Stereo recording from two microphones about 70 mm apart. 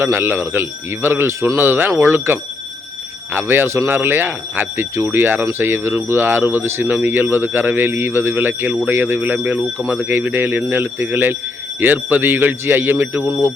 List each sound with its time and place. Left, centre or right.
0.0 s speech: right